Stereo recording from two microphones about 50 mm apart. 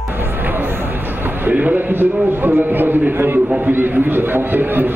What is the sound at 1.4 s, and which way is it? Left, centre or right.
A man's voice, right.